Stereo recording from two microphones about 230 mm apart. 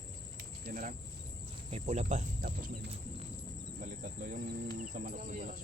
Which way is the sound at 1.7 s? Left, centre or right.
Right.